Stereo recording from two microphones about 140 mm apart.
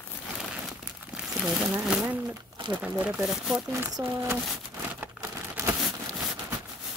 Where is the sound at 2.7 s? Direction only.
10° right (ahead or behind).